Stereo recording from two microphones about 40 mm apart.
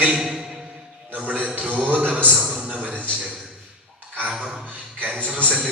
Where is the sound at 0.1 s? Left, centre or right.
Centre.